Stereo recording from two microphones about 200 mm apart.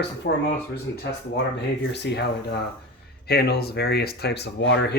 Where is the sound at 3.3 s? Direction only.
50° left (ahead or behind).